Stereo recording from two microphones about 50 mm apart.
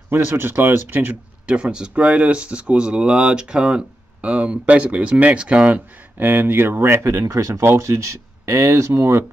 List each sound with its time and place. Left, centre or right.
0.3 s speech: right
1.4 s speech: right
6.1 s speech: right
7.0 s speech: right